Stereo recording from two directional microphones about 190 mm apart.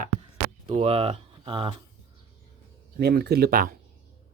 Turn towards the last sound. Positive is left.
turn(degrees=-50)  # may be behind; listen again after turning